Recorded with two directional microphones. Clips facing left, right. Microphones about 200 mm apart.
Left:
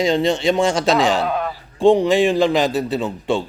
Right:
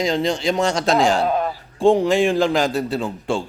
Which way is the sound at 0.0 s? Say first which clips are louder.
Left 3 dB; centre (ahead or behind).